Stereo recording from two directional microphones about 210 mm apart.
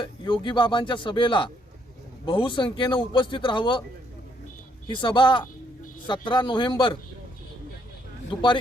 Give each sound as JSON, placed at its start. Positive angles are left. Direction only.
{"t": 0.0, "sound": "speech", "side_deg": 20}
{"t": 4.9, "sound": "speech", "side_deg": 25}
{"t": 8.3, "sound": "speech", "side_deg": 20}